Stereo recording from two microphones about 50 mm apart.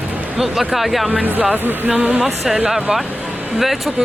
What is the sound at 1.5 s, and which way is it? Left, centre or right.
Speech, right.